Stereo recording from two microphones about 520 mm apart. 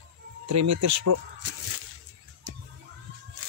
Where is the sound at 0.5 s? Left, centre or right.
Right.